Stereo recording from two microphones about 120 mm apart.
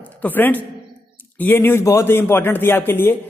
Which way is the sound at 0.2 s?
15° left (ahead or behind).